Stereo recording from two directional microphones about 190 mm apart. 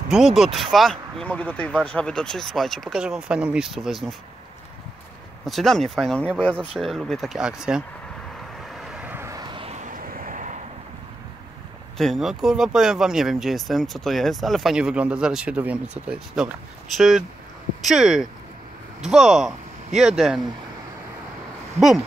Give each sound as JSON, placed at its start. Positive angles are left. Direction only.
{"t": 0.1, "sound": "speech", "side_deg": 0}
{"t": 5.4, "sound": "speech", "side_deg": 0}
{"t": 8.6, "sound": "vehicle", "side_deg": -5}
{"t": 12.0, "sound": "speech", "side_deg": 0}
{"t": 21.7, "sound": "speech", "side_deg": 0}